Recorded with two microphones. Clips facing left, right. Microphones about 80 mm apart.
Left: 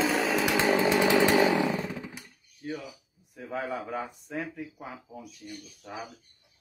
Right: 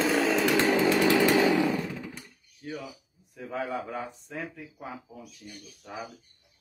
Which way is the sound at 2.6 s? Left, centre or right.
Centre.